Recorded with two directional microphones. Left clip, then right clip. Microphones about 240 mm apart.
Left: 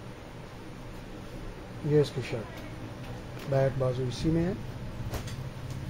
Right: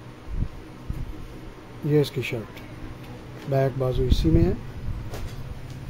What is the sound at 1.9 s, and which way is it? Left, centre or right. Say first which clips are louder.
Speech: right 3 dB; right.